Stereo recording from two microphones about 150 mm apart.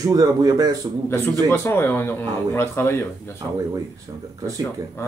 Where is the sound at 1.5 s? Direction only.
15° left (ahead or behind).